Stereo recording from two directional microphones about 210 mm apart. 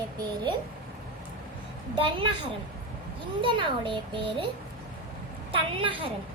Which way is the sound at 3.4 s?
25° right (ahead or behind).